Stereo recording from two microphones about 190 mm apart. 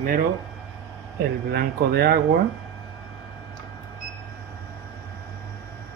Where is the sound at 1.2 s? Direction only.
55° right (ahead or behind).